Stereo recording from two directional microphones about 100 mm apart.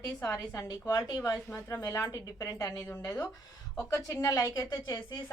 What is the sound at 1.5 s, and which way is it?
A woman's voice, 25° left (ahead or behind).